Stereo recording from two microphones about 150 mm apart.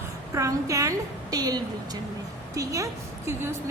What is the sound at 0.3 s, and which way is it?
A woman's voice, 20° right (ahead or behind).